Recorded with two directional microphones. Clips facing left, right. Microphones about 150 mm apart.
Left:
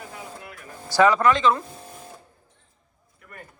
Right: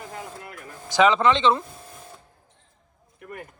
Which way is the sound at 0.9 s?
20° right (ahead or behind).